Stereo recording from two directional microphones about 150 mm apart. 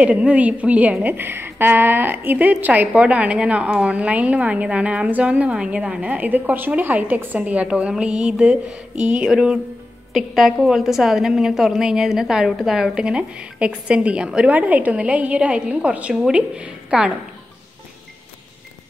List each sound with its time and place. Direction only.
0.0 s a woman's voice: 10° right (ahead or behind)